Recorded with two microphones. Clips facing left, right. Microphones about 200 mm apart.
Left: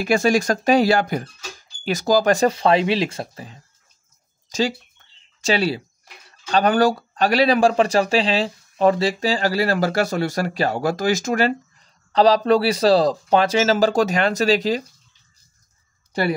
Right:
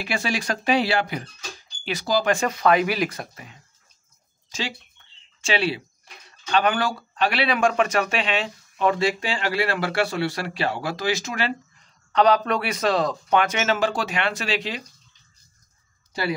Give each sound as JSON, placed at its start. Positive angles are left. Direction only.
{"t": 0.0, "sound": "speech", "side_deg": 45}